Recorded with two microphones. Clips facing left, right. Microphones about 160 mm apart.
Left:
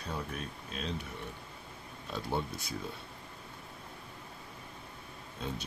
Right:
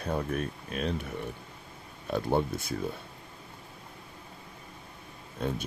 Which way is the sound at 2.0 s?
55° right (ahead or behind).